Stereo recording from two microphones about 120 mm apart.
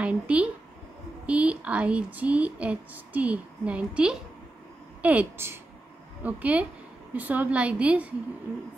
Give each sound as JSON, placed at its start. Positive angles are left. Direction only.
{"t": 0.0, "sound": "a woman's voice", "side_deg": -10}